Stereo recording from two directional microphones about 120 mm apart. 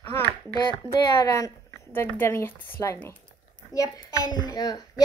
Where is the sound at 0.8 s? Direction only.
30° left (ahead or behind).